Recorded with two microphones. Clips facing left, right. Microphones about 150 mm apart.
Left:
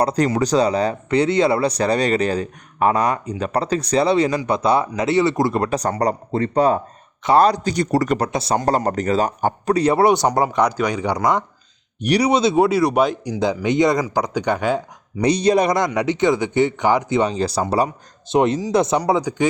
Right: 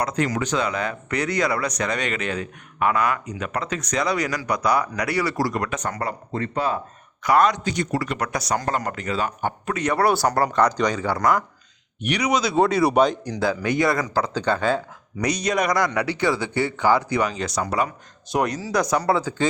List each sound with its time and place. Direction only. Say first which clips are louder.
0.0 s speech: left 6 dB; 30° left (ahead or behind)
8.2 s speech: left 5 dB; 30° left (ahead or behind)
11.9 s speech: left 6 dB; 35° left (ahead or behind)
12.5 s speech: left 2 dB; 5° left (ahead or behind)
13.4 s speech: left 4 dB; 20° left (ahead or behind)
15.2 s speech: left 7 dB; 30° left (ahead or behind)